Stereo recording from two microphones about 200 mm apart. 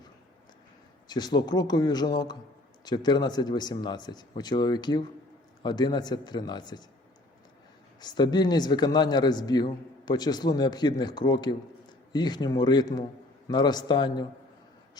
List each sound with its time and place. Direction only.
1.0 s speech: 20° left (ahead or behind)
8.0 s speech: 20° left (ahead or behind)